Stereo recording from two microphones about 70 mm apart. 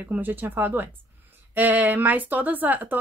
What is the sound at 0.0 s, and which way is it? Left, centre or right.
Speech, right.